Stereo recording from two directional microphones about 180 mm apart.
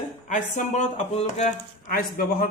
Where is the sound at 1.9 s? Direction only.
55° left (ahead or behind).